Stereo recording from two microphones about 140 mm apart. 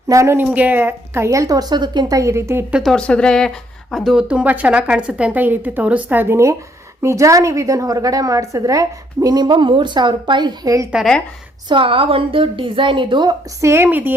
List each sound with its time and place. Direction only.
0.1 s a woman's voice: 20° right (ahead or behind)
2.7 s a woman's voice: 5° left (ahead or behind); by 10.8 s 25° right (ahead or behind)
10.9 s speech: centre (ahead or behind)
11.7 s a woman's voice: 40° right (ahead or behind)
13.6 s speech: 20° right (ahead or behind)